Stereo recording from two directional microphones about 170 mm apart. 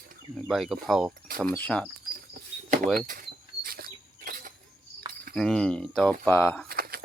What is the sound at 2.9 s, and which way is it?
Speech, 55° right (ahead or behind).